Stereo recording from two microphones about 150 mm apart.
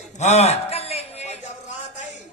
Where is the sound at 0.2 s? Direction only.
50° left (ahead or behind).